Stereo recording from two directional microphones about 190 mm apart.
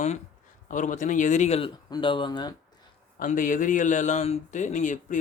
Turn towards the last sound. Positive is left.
turn(degrees=40)  # may be behind; listen again after turning